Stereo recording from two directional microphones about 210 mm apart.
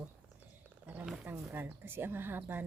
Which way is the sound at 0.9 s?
5° right (ahead or behind).